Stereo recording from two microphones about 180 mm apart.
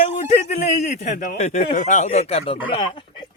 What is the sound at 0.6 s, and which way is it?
Speech, 40° left (ahead or behind).